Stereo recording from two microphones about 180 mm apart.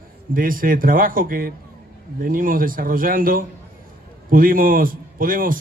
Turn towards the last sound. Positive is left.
turn(degrees=-50)  # may be behind; listen again after turning